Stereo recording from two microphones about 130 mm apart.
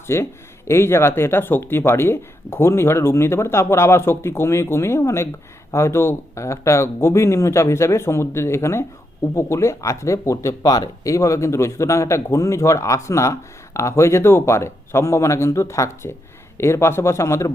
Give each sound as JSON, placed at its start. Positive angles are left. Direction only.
{"t": 0.1, "sound": "speech", "side_deg": 20}